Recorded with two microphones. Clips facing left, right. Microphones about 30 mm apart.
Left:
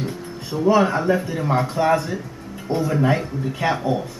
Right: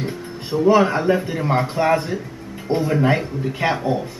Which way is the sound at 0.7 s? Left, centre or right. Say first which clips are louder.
Right 1 dB; centre.